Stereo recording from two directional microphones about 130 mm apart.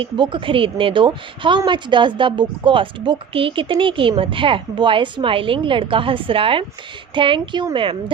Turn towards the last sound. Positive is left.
turn(degrees=-35)  # may be behind; listen again after turning